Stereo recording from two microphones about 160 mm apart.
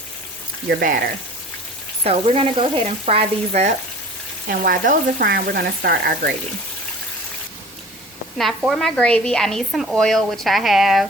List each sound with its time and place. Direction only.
0.7 s speech: 70° right (ahead or behind)
2.0 s frying: 40° right (ahead or behind)
4.4 s speech: 65° right (ahead or behind); by 6.3 s 80° right
8.4 s speech: centre (ahead or behind)